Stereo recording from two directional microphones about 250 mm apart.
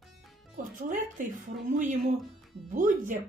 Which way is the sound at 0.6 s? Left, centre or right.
Right.